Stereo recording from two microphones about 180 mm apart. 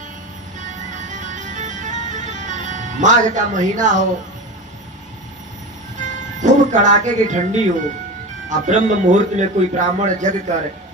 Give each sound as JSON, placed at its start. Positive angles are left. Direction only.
{"t": 1.0, "sound": "music", "side_deg": -45}
{"t": 6.0, "sound": "music", "side_deg": -45}
{"t": 8.4, "sound": "a man's voice", "side_deg": -45}